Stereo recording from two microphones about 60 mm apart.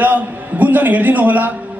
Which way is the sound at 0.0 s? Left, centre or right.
Right.